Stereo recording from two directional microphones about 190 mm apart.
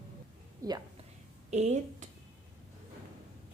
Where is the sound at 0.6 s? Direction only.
20° right (ahead or behind).